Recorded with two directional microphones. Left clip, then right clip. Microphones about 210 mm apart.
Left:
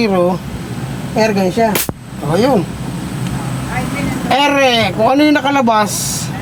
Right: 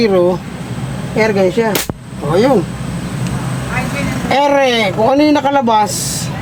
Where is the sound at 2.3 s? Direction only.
20° left (ahead or behind).